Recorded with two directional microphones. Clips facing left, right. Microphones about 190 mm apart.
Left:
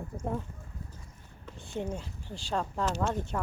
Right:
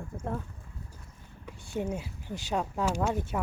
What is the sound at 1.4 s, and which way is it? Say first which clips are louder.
Speech: right 2 dB; 10° right (ahead or behind).